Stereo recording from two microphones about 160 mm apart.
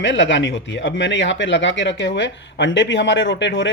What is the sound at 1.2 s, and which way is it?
Speech, 90° left.